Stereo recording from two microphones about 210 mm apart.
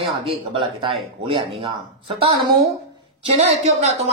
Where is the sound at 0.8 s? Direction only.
25° right (ahead or behind).